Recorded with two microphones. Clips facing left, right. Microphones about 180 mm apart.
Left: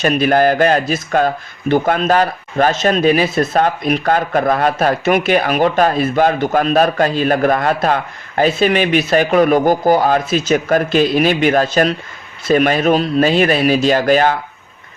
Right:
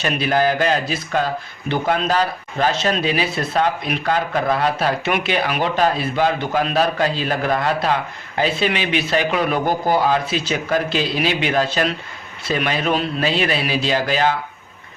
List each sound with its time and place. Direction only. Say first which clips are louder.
0.0 s a man's voice: left 6 dB; 50° left (ahead or behind)